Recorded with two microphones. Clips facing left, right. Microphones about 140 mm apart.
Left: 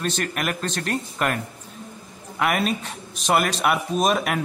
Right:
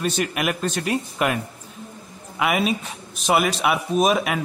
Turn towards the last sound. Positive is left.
turn(degrees=0)  # may be behind; listen again after turning